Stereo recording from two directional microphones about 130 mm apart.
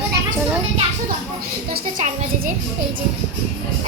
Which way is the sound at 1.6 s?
90° right.